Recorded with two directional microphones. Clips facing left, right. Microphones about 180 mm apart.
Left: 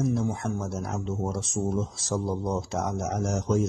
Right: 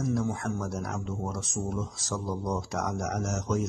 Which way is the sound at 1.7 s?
25° left (ahead or behind).